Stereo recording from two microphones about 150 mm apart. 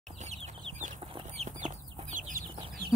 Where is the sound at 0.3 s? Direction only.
50° right (ahead or behind).